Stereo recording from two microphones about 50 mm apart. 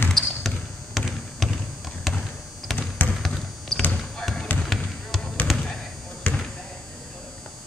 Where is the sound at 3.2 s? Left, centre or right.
Centre.